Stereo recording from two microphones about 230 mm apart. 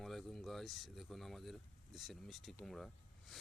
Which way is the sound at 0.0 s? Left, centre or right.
Centre.